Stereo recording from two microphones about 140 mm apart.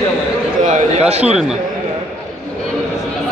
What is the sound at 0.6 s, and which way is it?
Speech, 65° right (ahead or behind).